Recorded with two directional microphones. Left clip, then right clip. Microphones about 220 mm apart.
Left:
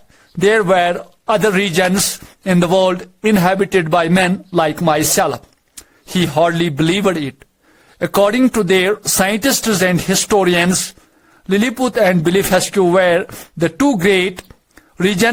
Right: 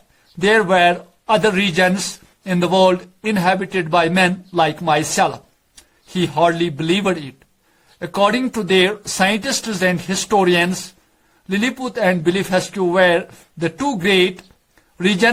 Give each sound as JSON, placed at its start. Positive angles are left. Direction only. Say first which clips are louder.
{"t": 0.4, "sound": "a man's voice", "louder": "left 1 dB", "side_deg": 45}